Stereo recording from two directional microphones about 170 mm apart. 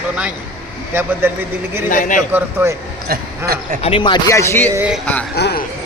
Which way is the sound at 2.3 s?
10° right (ahead or behind).